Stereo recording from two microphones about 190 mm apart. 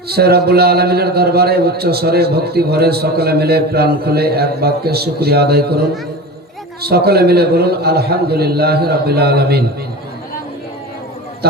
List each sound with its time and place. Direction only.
0.1 s a man's voice: 55° right (ahead or behind)
6.8 s a man's voice: 55° right (ahead or behind)